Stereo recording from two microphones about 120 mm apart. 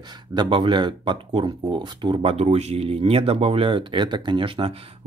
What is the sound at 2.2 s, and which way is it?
Speech, 60° right (ahead or behind).